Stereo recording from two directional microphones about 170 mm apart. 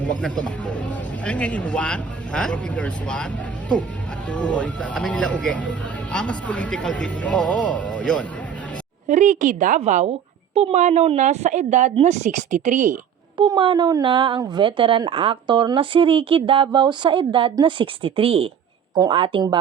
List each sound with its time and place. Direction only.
0.0 s speech: 5° left (ahead or behind)
4.3 s speech: 5° left (ahead or behind)
9.0 s a woman's voice: 45° right (ahead or behind)
13.3 s speech: 25° right (ahead or behind)